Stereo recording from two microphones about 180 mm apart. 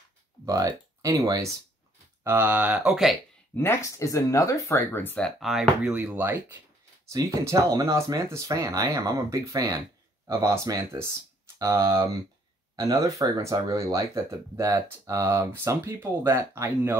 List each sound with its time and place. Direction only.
0.5 s speech: 20° right (ahead or behind); by 3.2 s centre (ahead or behind)
3.5 s speech: 15° left (ahead or behind); by 16.9 s 15° right (ahead or behind)